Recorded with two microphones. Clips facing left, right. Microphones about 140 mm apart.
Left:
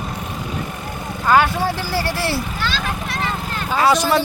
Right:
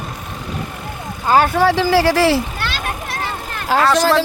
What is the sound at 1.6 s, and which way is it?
Speech, 90° right.